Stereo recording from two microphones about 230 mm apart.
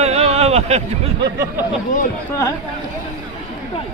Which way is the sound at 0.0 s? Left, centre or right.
Right.